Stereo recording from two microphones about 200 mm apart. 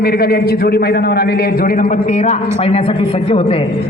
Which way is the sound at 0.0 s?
50° left (ahead or behind).